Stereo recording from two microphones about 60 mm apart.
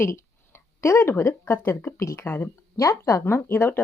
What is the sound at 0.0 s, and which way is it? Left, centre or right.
Speech, left.